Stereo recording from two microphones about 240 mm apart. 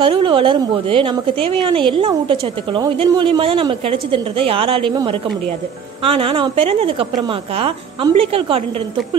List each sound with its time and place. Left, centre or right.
0.0 s a woman's voice: right